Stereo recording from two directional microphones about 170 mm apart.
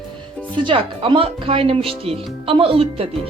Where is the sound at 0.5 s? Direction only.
30° right (ahead or behind).